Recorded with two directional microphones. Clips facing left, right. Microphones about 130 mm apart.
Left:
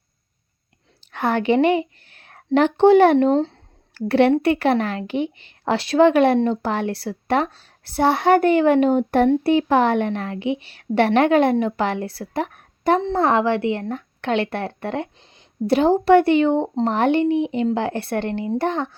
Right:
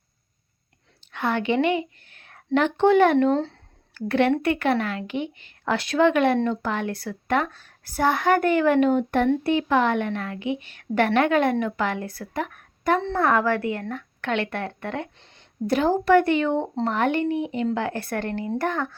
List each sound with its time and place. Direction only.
1.1 s a woman's voice: 40° left (ahead or behind); by 18.9 s 25° left (ahead or behind)